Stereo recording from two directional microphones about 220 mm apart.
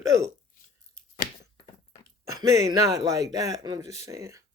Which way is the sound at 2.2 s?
15° right (ahead or behind).